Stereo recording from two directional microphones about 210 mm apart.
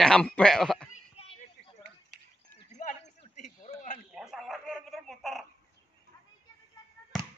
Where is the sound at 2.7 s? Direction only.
35° left (ahead or behind).